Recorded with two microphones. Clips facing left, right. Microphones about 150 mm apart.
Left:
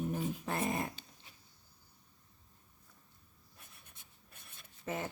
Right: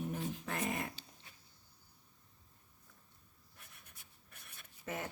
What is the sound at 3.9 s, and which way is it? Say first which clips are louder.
Writing: left 1 dB; 25° left (ahead or behind).